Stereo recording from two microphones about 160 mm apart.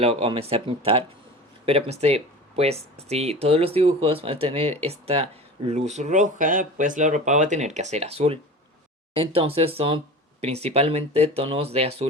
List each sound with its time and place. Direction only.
0.0 s speech: 35° right (ahead or behind)